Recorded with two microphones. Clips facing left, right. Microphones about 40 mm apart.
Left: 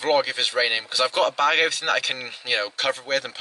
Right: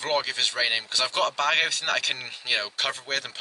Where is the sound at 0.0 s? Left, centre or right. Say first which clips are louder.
Left 5 dB; centre.